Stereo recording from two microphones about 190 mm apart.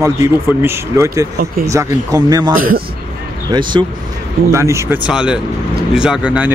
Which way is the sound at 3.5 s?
25° right (ahead or behind).